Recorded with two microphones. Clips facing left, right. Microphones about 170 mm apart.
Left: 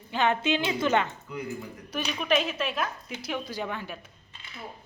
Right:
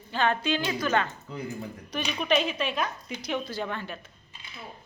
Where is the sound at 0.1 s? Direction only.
20° left (ahead or behind).